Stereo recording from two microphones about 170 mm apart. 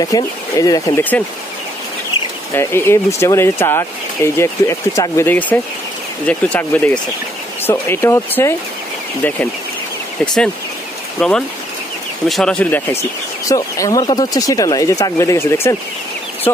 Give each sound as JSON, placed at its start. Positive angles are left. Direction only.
{"t": 0.0, "sound": "speech", "side_deg": 20}
{"t": 2.5, "sound": "speech", "side_deg": 15}
{"t": 10.2, "sound": "speech", "side_deg": 5}
{"t": 13.5, "sound": "speech", "side_deg": 20}